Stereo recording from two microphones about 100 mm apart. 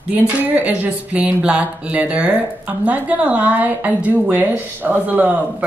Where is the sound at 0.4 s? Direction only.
15° right (ahead or behind).